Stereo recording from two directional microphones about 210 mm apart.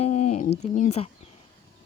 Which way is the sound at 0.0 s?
30° left (ahead or behind).